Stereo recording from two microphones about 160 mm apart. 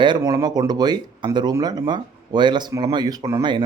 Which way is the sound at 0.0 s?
25° right (ahead or behind).